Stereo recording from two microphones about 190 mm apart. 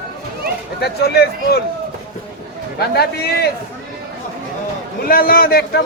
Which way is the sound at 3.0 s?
55° left (ahead or behind).